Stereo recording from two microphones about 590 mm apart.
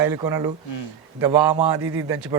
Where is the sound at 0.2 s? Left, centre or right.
Centre.